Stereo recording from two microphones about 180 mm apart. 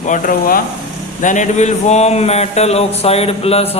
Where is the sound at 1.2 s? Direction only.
45° left (ahead or behind).